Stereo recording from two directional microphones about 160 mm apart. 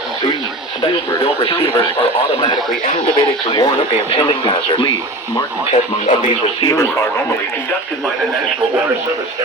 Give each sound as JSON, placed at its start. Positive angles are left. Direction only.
{"t": 1.2, "sound": "speech", "side_deg": 35}
{"t": 3.2, "sound": "speech", "side_deg": 25}
{"t": 5.7, "sound": "speech", "side_deg": 50}
{"t": 6.6, "sound": "speech", "side_deg": 25}